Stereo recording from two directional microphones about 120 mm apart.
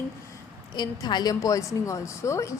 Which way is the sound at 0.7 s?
35° left (ahead or behind).